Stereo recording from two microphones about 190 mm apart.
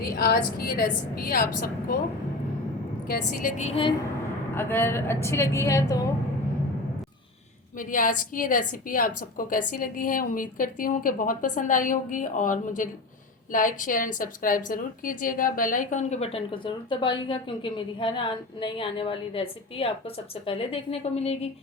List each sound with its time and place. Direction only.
0.2 s a woman's voice: 55° left (ahead or behind)
3.1 s a woman's voice: 45° left (ahead or behind); by 3.9 s 30° left (ahead or behind)
4.5 s a woman's voice: 10° left (ahead or behind)
7.8 s a woman's voice: 45° left (ahead or behind)